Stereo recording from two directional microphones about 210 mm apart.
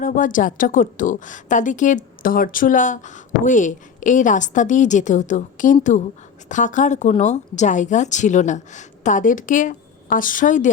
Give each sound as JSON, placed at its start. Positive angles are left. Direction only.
{"t": 0.0, "sound": "a woman's voice", "side_deg": 40}